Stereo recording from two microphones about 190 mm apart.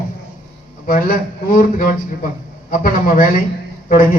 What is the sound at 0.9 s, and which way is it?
A man's voice, 45° left (ahead or behind).